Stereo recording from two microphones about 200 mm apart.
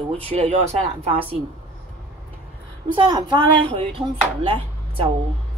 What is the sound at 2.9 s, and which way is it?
Speech, 20° right (ahead or behind).